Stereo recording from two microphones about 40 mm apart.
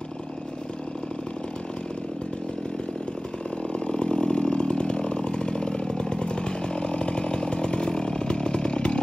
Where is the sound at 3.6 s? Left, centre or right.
Left.